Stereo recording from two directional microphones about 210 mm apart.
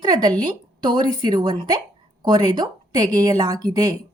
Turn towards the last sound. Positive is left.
turn(degrees=-20)  # may be behind; listen again after turning